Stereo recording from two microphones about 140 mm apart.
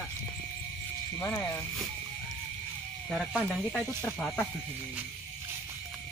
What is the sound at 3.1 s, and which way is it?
Speech, 5° right (ahead or behind).